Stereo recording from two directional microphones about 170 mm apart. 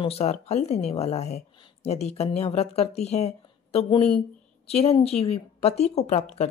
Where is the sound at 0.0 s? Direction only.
40° left (ahead or behind).